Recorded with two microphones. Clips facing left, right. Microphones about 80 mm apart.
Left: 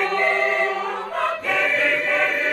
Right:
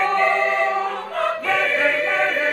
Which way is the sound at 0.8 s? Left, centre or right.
Centre.